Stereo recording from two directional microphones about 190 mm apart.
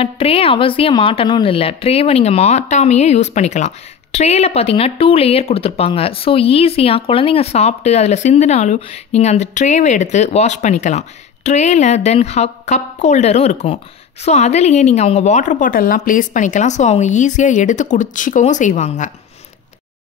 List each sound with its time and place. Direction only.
0.0 s a woman's voice: 30° left (ahead or behind)